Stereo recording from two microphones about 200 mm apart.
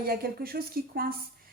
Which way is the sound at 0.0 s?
50° right (ahead or behind).